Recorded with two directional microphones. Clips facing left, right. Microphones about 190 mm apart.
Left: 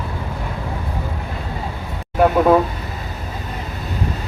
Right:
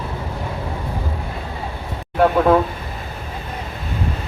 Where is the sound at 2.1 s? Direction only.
5° left (ahead or behind).